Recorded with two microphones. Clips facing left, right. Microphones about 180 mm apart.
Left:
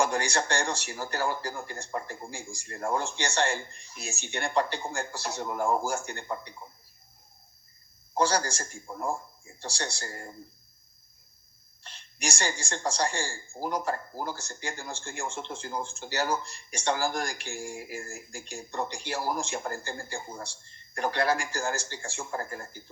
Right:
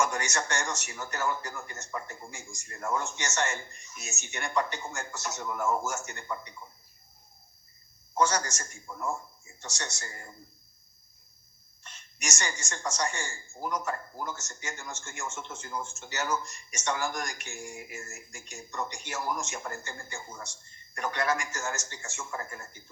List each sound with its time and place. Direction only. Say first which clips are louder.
0.0 s a woman's voice: left 3 dB; 30° left (ahead or behind)
8.1 s a woman's voice: left 1 dB; 30° left (ahead or behind)
11.8 s a woman's voice: left 5 dB; 30° left (ahead or behind)